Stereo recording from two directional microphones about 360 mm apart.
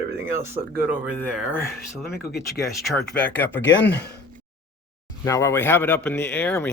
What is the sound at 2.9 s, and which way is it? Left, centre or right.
Speech, centre.